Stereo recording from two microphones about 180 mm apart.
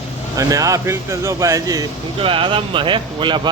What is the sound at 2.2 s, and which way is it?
Speech, 30° right (ahead or behind).